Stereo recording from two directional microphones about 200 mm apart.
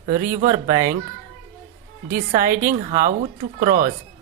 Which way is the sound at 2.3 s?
45° right (ahead or behind).